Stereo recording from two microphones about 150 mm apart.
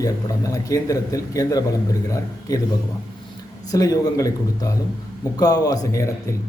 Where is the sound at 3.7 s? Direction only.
25° left (ahead or behind).